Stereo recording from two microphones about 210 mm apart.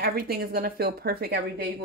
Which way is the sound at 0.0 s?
45° right (ahead or behind).